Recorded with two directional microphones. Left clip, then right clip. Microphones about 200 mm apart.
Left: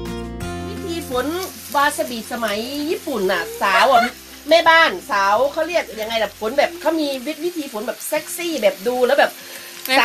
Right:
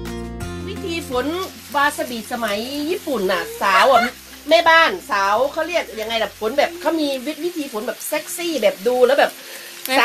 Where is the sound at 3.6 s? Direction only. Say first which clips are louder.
Right 1 dB; 40° right (ahead or behind).